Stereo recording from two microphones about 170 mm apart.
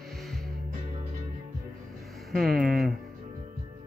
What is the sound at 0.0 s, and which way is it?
Music, centre (ahead or behind).